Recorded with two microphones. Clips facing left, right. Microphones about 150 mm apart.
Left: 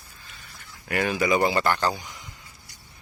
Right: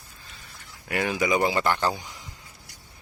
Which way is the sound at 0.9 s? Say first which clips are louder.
Left 1 dB; 15° right (ahead or behind).